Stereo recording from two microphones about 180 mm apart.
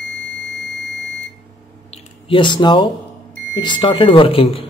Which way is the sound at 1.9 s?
30° left (ahead or behind).